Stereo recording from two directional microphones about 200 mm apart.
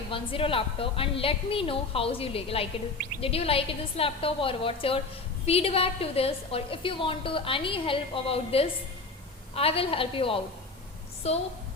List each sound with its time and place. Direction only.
0.1 s a woman's voice: 25° left (ahead or behind)